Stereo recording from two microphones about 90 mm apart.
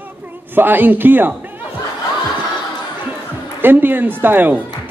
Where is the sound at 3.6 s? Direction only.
20° right (ahead or behind).